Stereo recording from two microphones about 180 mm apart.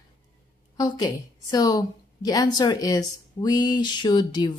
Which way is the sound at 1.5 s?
20° left (ahead or behind).